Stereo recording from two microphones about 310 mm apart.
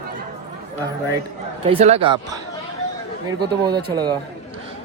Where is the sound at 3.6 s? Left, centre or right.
Centre.